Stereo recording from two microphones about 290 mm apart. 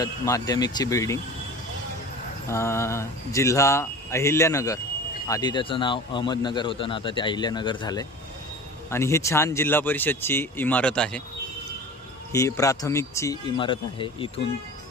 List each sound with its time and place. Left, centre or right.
0.0 s a man's voice: centre
2.4 s a man's voice: centre
12.3 s a man's voice: centre